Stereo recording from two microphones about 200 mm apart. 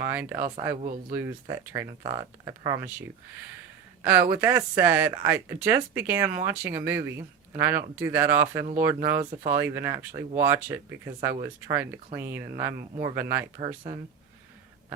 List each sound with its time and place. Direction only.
0.0 s speech: 10° right (ahead or behind)
4.0 s speech: 10° right (ahead or behind)